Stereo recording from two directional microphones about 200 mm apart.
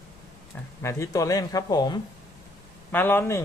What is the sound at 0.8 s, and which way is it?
Speech, 15° left (ahead or behind).